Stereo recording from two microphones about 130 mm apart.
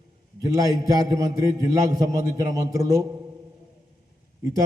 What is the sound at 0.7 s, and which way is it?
A man's voice, 25° right (ahead or behind).